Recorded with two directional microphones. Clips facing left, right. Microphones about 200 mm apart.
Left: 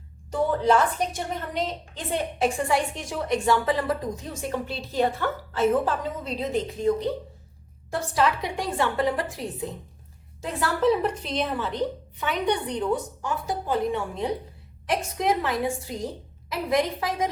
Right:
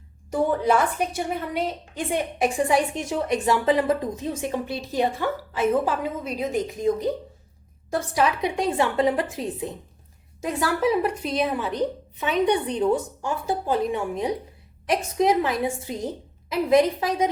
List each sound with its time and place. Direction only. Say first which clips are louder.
0.3 s a woman's voice: right 1 dB; 10° right (ahead or behind)
8.1 s a woman's voice: right 1 dB; 20° right (ahead or behind)